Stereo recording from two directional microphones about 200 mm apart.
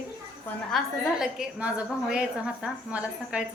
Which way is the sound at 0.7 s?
5° right (ahead or behind).